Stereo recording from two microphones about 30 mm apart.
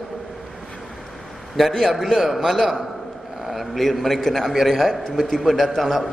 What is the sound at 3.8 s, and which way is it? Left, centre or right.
Speech, centre.